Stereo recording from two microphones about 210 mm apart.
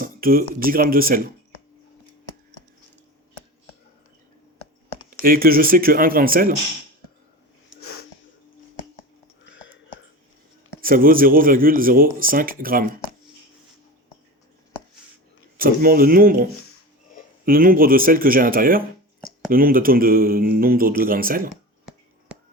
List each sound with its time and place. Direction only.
0.0 s a sound: 45° right (ahead or behind)
0.6 s speech: 45° right (ahead or behind)
5.2 s speech: 45° right (ahead or behind)
7.7 s sneeze: 65° left (ahead or behind)
10.8 s speech: 45° right (ahead or behind)
15.5 s speech: 45° right (ahead or behind)
21.5 s a sound: centre (ahead or behind)